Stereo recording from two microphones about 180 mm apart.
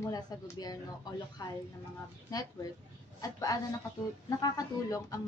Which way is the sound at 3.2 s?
20° left (ahead or behind).